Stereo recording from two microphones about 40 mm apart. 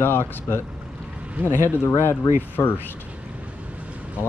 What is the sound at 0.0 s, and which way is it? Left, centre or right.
Speech, left.